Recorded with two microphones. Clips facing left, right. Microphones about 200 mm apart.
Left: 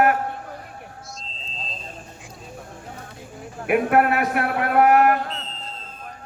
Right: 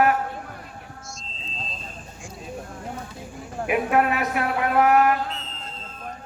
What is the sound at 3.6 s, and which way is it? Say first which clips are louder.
Speech: left 3 dB; 55° left (ahead or behind).